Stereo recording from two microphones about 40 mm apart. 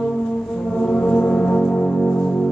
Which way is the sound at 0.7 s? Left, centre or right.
Left.